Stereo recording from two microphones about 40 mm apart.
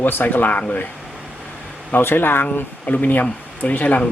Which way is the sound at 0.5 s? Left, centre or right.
Left.